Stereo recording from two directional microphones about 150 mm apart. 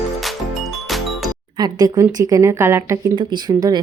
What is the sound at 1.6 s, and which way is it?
A woman's voice, 25° right (ahead or behind).